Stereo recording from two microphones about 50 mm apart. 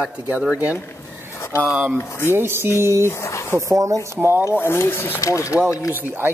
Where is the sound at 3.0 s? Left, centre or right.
Left.